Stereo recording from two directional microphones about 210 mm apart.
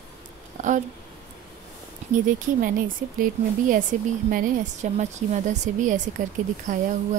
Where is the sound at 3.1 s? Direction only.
40° right (ahead or behind).